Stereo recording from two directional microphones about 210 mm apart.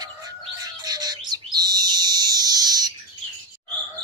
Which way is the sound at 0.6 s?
20° right (ahead or behind).